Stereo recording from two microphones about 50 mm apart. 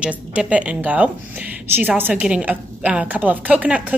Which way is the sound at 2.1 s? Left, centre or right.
Right.